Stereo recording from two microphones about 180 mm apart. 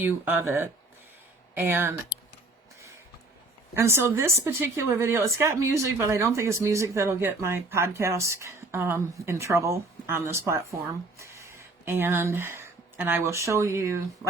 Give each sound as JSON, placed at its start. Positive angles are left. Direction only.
{"t": 0.0, "sound": "speech", "side_deg": -10}
{"t": 3.8, "sound": "speech", "side_deg": -15}